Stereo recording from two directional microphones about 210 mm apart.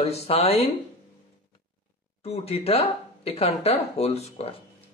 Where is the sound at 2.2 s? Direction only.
30° left (ahead or behind).